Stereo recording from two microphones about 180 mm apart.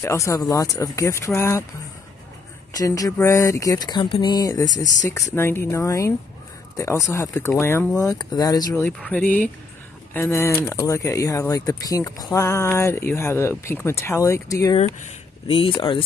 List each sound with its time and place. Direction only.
0.0 s speech: 15° left (ahead or behind)
2.7 s speech: 20° left (ahead or behind)
8.8 s speech: 10° left (ahead or behind)
15.4 s speech: 30° left (ahead or behind)